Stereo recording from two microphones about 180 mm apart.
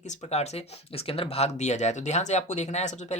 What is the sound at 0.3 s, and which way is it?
Speech, 35° left (ahead or behind).